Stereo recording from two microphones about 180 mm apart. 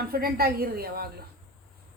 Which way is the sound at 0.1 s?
55° right (ahead or behind).